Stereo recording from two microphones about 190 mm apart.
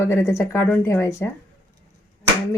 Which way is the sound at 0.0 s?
15° left (ahead or behind).